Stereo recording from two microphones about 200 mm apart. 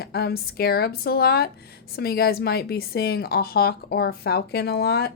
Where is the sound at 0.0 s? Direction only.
50° left (ahead or behind).